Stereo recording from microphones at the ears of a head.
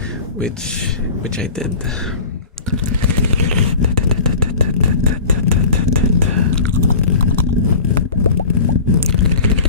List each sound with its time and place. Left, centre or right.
3.7 s vehicle: left